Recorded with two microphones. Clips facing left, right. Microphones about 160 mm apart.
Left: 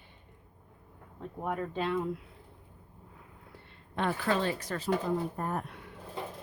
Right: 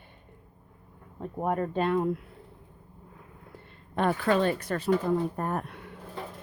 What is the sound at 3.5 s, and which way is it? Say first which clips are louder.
Speech: right 5 dB; 50° right (ahead or behind).